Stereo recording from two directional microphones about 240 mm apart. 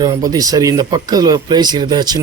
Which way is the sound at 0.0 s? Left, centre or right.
Centre.